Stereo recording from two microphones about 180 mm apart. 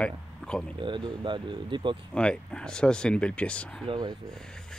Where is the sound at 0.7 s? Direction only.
25° right (ahead or behind).